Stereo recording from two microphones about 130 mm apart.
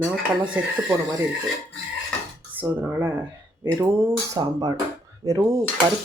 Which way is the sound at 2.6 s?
20° right (ahead or behind).